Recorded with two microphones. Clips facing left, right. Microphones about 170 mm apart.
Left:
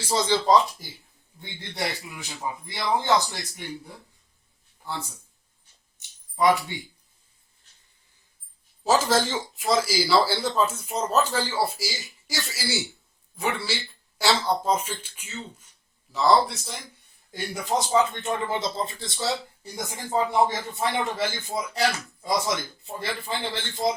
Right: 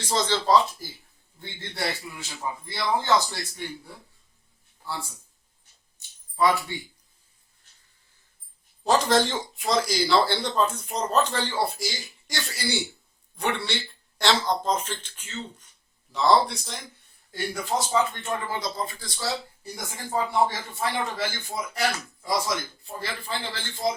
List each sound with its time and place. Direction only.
0.0 s speech: 10° left (ahead or behind)
6.0 s a sound: 20° left (ahead or behind)
8.8 s speech: 5° left (ahead or behind)
17.3 s speech: 20° left (ahead or behind)